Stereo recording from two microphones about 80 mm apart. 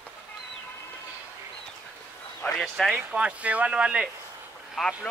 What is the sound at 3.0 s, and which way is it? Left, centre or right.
Speech, centre.